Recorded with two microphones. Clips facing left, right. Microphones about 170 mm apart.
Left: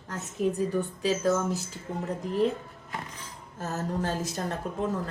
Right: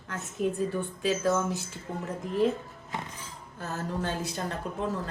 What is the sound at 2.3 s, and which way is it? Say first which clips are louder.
Speech: even; centre (ahead or behind).